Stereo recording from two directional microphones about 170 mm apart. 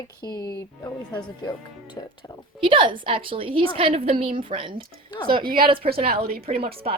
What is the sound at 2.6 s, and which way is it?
A woman's voice, 30° right (ahead or behind).